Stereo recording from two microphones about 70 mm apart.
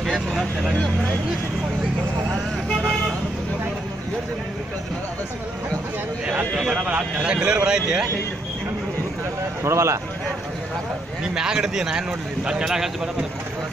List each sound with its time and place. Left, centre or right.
0.0 s vehicle: centre
6.2 s speech: centre
9.6 s speech: right
11.3 s speech: centre